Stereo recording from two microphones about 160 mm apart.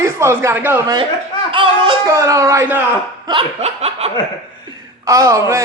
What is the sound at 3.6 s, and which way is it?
Snicker, 40° right (ahead or behind).